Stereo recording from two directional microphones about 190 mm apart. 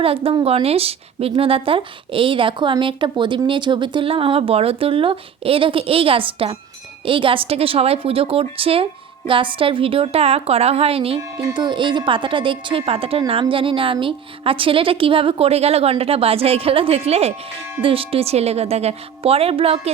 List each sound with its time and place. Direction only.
0.0 s a woman's voice: 30° right (ahead or behind)